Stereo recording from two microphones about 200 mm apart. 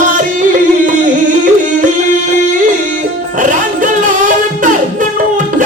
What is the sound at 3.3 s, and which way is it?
Music, 40° right (ahead or behind).